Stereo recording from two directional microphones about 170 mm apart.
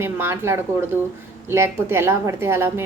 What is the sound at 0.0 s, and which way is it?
A woman's voice, 15° right (ahead or behind).